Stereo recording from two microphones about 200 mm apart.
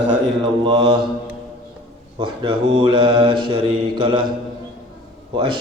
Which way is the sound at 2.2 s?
25° right (ahead or behind).